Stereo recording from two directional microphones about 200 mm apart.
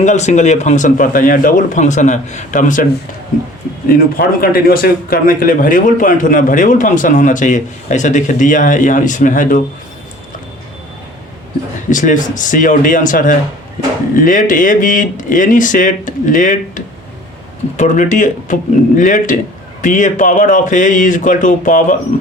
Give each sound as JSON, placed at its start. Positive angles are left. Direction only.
{"t": 0.0, "sound": "speech", "side_deg": 35}
{"t": 3.8, "sound": "speech", "side_deg": 45}
{"t": 11.9, "sound": "speech", "side_deg": 40}